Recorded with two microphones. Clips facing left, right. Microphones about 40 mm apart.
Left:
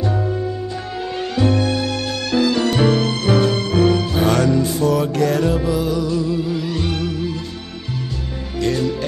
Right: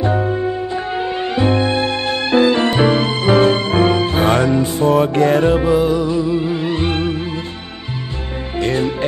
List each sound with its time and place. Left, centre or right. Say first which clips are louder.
0.0 s music: right 4 dB; right
8.5 s music: right 2 dB; right